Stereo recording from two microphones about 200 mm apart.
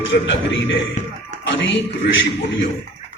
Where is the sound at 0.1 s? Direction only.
65° left (ahead or behind).